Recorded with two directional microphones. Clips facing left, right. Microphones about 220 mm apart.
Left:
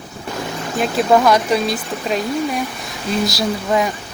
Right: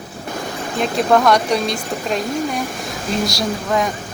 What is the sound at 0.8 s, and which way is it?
Speech, 5° left (ahead or behind).